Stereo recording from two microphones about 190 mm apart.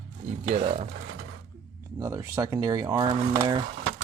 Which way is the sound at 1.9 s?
15° right (ahead or behind).